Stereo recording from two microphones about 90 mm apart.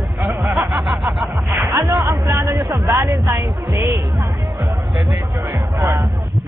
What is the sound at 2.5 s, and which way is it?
Speech, 45° right (ahead or behind).